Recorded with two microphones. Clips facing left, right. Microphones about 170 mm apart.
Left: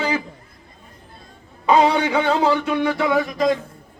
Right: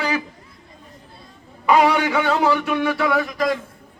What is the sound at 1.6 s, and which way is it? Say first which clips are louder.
A man's voice: even; 20° left (ahead or behind).